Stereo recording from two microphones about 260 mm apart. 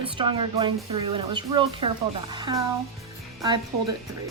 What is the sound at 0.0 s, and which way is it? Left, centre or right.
A woman's voice, centre.